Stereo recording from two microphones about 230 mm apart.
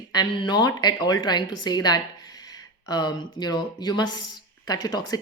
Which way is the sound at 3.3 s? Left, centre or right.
Centre.